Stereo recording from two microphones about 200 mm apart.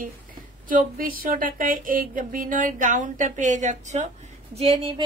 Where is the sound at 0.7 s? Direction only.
45° right (ahead or behind).